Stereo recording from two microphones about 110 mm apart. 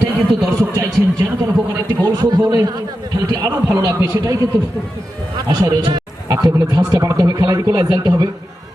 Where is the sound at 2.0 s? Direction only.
40° right (ahead or behind).